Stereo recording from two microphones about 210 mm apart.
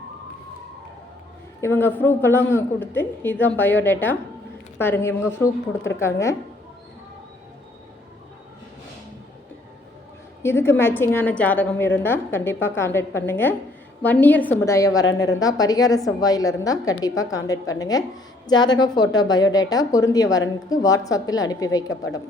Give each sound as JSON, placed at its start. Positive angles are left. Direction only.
{"t": 1.6, "sound": "a man's voice", "side_deg": 10}
{"t": 10.4, "sound": "a man's voice", "side_deg": 10}